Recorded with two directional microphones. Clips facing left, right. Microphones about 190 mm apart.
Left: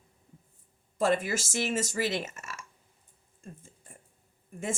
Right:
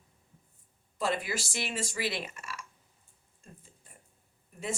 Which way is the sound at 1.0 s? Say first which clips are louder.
Left 5 dB; 45° left (ahead or behind).